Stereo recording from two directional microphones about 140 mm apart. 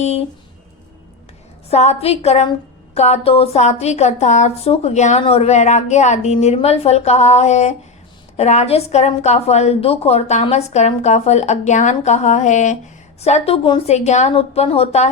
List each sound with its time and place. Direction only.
0.0 s a woman's voice: 50° left (ahead or behind)
1.7 s a woman's voice: 50° left (ahead or behind)